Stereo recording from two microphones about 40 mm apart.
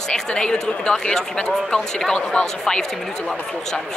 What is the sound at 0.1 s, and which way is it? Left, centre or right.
Speech, left.